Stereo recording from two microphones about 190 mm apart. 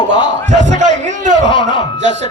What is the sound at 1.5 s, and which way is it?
Speech, 25° left (ahead or behind).